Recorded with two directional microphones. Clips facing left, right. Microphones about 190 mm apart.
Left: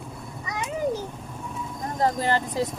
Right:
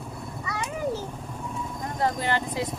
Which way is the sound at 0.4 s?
20° left (ahead or behind).